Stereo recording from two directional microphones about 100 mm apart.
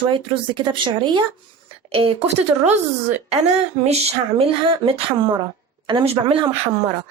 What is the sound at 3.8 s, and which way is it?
Speech, 80° right.